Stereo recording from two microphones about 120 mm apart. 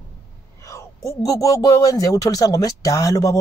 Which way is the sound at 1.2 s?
30° left (ahead or behind).